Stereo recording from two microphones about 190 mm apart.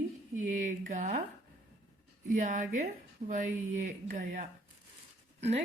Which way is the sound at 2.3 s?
45° right (ahead or behind).